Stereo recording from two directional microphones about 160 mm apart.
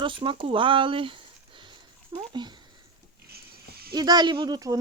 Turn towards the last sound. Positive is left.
turn(degrees=-25)  # may be behind; listen again after turning